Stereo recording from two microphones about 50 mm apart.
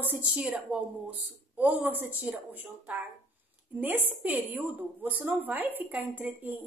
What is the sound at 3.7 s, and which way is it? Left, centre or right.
A woman's voice, right.